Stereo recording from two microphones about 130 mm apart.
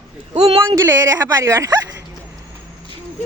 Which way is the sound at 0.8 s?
25° right (ahead or behind).